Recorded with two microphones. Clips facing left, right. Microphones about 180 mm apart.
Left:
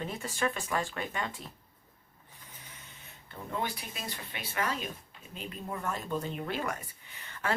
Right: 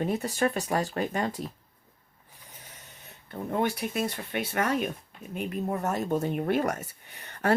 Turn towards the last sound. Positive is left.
turn(degrees=-45)  # may be behind; listen again after turning